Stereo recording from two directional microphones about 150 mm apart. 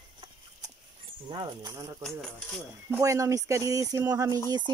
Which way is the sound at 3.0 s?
20° right (ahead or behind).